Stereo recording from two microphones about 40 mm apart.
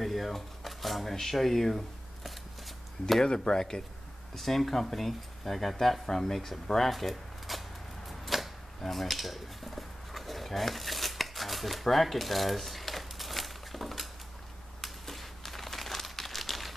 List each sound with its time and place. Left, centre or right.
0.0 s speech: centre
3.3 s speech: centre
4.4 s speech: centre
8.1 s a sound: centre
14.8 s crumpling: centre